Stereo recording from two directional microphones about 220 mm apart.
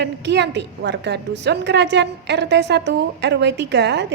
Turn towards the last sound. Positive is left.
turn(degrees=-50)  # may be behind; listen again after turning